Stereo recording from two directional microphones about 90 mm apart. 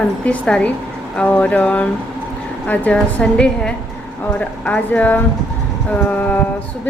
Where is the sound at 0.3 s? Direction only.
10° left (ahead or behind).